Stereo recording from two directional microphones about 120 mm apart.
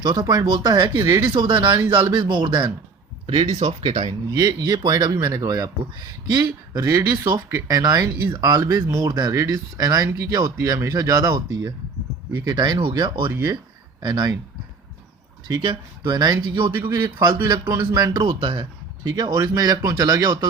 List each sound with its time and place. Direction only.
0.0 s speech: 35° right (ahead or behind)
1.2 s speech: 40° right (ahead or behind)
3.4 s speech: 65° right (ahead or behind)
3.7 s speech: 50° right (ahead or behind)
4.3 s speech: 35° right (ahead or behind)
13.3 s speech: 25° right (ahead or behind)
14.0 s speech: 40° right (ahead or behind)
15.6 s speech: 40° right (ahead or behind)
16.7 s speech: 20° right (ahead or behind)
18.2 s speech: 45° right (ahead or behind)
19.1 s speech: 30° right (ahead or behind)